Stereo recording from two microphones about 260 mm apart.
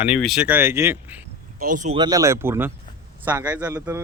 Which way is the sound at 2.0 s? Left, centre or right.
Centre.